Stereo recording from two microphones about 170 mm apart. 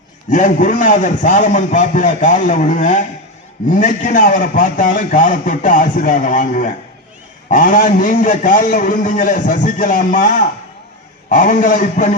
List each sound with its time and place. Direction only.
0.3 s a man's voice: 45° left (ahead or behind)